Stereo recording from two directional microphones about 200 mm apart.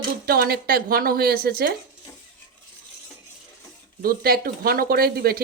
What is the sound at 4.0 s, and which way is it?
Speech, 50° right (ahead or behind).